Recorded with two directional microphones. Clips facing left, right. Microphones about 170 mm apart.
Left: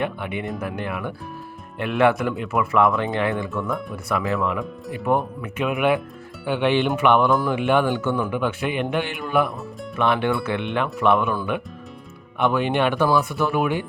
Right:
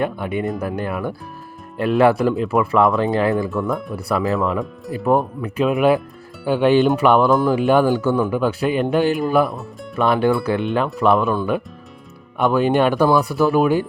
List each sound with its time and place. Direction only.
0.0 s music: 40° right (ahead or behind)
0.6 s speech: 40° right (ahead or behind)
3.7 s speech: centre (ahead or behind)
3.9 s speech: 35° right (ahead or behind)
9.5 s speech: centre (ahead or behind)
10.0 s speech: 40° right (ahead or behind)
12.4 s speech: 40° right (ahead or behind)